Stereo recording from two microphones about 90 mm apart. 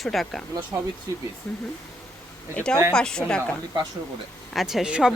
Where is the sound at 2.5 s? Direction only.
10° left (ahead or behind).